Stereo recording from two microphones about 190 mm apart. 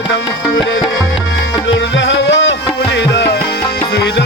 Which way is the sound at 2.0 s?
70° left (ahead or behind).